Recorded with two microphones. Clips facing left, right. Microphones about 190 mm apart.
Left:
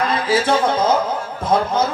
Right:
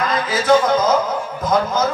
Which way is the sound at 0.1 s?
30° left (ahead or behind).